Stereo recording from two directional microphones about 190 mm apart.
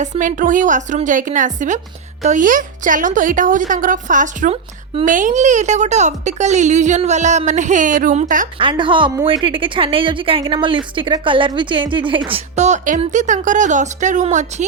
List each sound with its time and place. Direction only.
0.0 s a woman's voice: 40° right (ahead or behind)
8.5 s speech: 25° right (ahead or behind)